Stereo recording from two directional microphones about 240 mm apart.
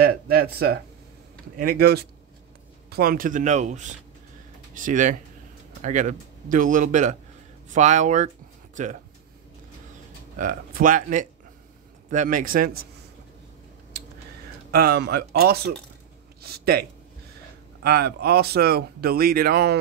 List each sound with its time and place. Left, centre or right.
0.0 s speech: right
10.3 s speech: right
14.7 s speech: right
16.3 s a sound: right
17.8 s speech: right